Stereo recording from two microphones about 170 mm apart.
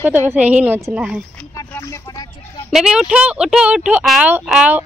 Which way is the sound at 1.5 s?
20° left (ahead or behind).